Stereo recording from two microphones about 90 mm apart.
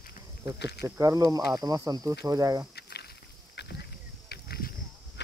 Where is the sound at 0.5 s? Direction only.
40° right (ahead or behind).